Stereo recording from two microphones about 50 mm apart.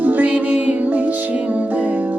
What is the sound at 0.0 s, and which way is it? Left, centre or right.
Music, right.